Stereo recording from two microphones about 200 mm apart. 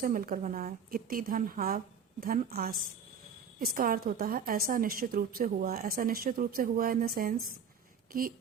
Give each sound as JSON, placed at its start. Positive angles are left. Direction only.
{"t": 0.0, "sound": "a woman's voice", "side_deg": -45}